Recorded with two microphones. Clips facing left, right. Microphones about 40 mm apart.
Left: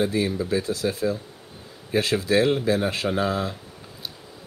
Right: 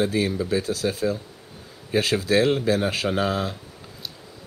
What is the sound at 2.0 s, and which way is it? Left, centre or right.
Speech, right.